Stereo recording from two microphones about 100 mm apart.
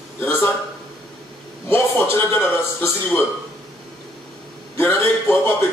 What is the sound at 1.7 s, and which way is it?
Music, 20° left (ahead or behind).